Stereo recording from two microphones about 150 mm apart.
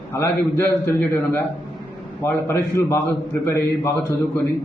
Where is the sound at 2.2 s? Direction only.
15° left (ahead or behind).